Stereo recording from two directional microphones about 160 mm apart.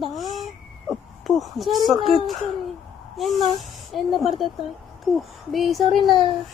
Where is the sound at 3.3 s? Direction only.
45° right (ahead or behind).